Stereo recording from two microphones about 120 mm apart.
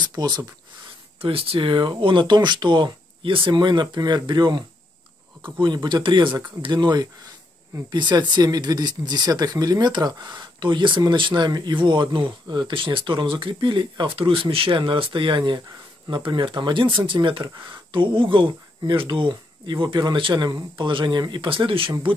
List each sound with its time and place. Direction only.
0.0 s speech: 35° right (ahead or behind)
1.2 s speech: 50° right (ahead or behind)